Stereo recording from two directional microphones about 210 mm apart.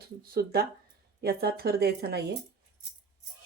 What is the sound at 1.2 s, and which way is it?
Speech, 50° right (ahead or behind).